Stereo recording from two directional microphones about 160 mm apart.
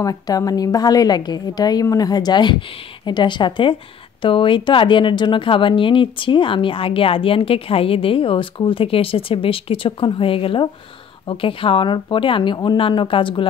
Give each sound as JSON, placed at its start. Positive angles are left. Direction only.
{"t": 0.0, "sound": "a woman's voice", "side_deg": 20}